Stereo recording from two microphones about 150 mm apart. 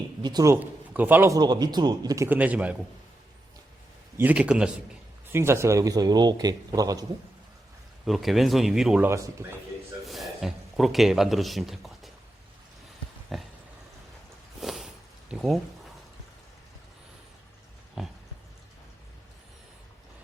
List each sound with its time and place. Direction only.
0.2 s a man's voice: 25° right (ahead or behind)
0.5 s a man's voice: 10° right (ahead or behind)
1.4 s a man's voice: 25° right (ahead or behind); by 2.7 s 10° right (ahead or behind)
4.2 s a man's voice: 10° right (ahead or behind)
5.3 s a man's voice: 15° right (ahead or behind)
8.0 s speech: centre (ahead or behind)
9.0 s a man's voice: 20° right (ahead or behind)
10.1 s speech: centre (ahead or behind)
13.3 s a sound: centre (ahead or behind)
14.6 s a sound: centre (ahead or behind)
18.0 s speech: centre (ahead or behind)